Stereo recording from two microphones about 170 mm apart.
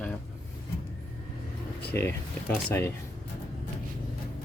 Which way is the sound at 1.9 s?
15° left (ahead or behind).